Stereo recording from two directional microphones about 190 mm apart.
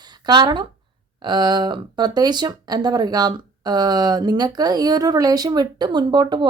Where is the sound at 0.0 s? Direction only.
20° right (ahead or behind).